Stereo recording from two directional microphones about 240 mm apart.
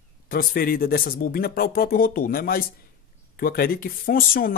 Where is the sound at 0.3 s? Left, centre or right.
Left.